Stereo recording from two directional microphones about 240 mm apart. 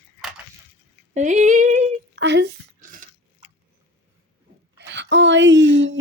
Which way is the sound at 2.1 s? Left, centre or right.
Right.